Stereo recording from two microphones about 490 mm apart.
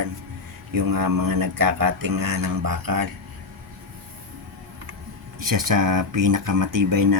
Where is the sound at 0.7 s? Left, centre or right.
Right.